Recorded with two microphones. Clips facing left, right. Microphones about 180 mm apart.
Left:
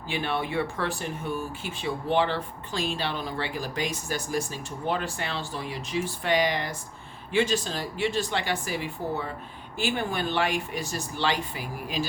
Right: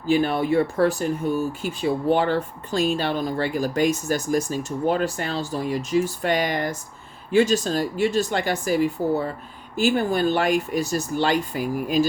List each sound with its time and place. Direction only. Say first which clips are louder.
0.1 s speech: right 9 dB; 40° right (ahead or behind)